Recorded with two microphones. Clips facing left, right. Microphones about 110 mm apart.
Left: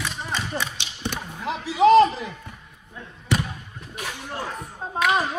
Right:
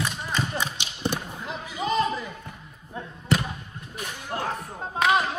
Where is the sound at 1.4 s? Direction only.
90° left.